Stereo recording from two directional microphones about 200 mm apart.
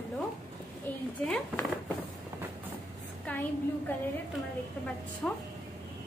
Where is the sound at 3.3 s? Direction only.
10° left (ahead or behind).